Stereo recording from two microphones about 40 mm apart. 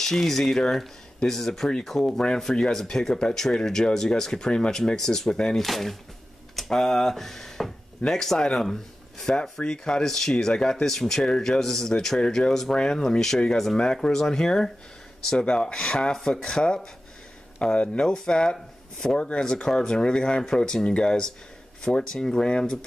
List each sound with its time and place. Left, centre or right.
0.0 s speech: centre
5.6 s speech: centre
11.2 s speech: centre
11.6 s speech: centre; by 19.4 s left
19.4 s speech: centre